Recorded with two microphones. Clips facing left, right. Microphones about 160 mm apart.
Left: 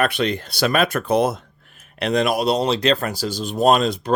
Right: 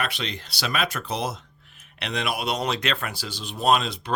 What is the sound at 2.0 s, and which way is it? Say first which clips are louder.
Speech: left 9 dB; 45° left (ahead or behind).